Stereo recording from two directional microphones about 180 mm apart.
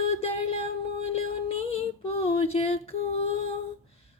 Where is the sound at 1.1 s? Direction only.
35° left (ahead or behind).